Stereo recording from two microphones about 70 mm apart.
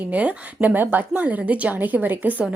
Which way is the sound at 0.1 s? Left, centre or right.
Right.